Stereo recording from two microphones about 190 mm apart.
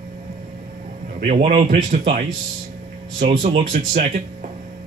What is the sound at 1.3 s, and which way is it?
Speech, 40° right (ahead or behind).